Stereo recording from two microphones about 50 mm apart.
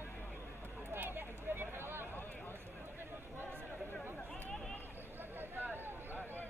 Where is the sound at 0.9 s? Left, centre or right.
Right.